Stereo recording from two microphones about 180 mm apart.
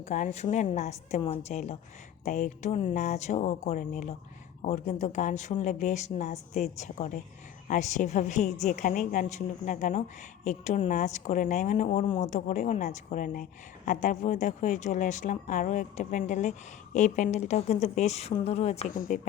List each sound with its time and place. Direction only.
0.1 s a woman's voice: 40° left (ahead or behind)
18.9 s a woman's voice: 50° left (ahead or behind)